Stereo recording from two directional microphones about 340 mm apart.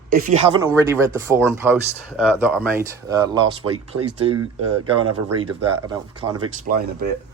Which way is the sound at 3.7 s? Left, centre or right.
Right.